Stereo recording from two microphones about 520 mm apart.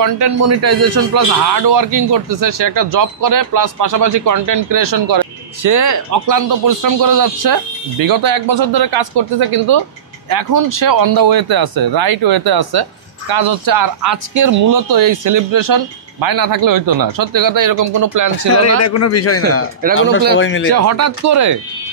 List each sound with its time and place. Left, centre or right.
0.0 s a man's voice: right
18.8 s a man's voice: left
19.8 s speech: centre
20.3 s a man's voice: left
20.7 s a man's voice: right